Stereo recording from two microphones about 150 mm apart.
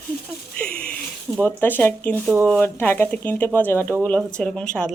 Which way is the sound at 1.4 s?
15° left (ahead or behind).